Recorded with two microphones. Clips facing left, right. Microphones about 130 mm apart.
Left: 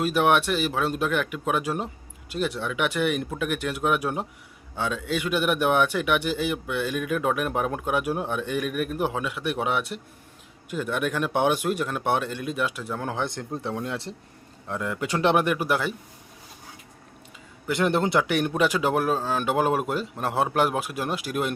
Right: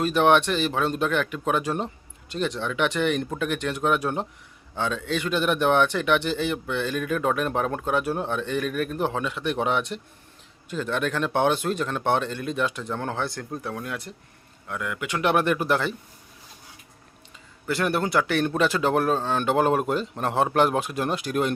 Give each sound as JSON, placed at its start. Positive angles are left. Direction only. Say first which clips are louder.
{"t": 0.0, "sound": "a man's voice", "louder": "right 2 dB", "side_deg": 5}
{"t": 13.2, "sound": "speech", "louder": "left 1 dB", "side_deg": 20}
{"t": 15.3, "sound": "a man's voice", "louder": "right 1 dB", "side_deg": 15}
{"t": 17.7, "sound": "a man's voice", "louder": "left 2 dB", "side_deg": 20}